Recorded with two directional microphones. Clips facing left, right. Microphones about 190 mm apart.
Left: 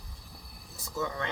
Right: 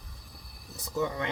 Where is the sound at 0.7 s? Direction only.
20° right (ahead or behind).